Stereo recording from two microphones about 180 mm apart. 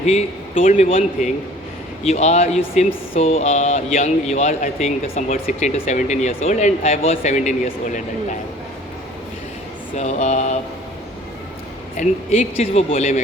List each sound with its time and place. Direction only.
0.0 s a man's voice: 40° left (ahead or behind)
10.0 s speech: 40° left (ahead or behind)
11.9 s speech: 35° left (ahead or behind)